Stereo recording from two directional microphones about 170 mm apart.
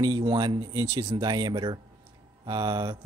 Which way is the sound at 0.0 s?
25° right (ahead or behind).